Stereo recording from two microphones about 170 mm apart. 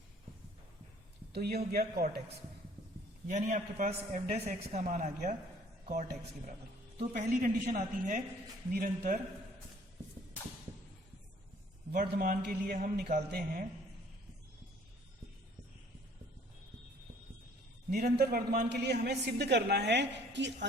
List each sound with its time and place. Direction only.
1.3 s speech: 70° right (ahead or behind)
3.2 s a man's voice: 45° right (ahead or behind)
12.0 s a man's voice: 65° right (ahead or behind)
17.9 s a man's voice: 60° right (ahead or behind); by 20.7 s 90° right